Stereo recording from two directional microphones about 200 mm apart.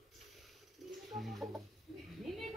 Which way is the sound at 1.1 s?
Centre (ahead or behind).